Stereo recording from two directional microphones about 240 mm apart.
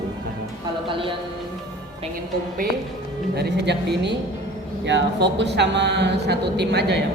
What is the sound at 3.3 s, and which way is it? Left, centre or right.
A man's voice, right.